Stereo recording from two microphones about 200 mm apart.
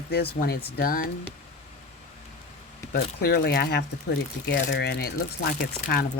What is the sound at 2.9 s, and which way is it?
Speech, 50° left (ahead or behind).